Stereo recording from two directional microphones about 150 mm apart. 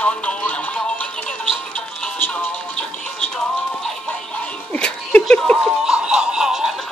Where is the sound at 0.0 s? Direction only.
5° left (ahead or behind).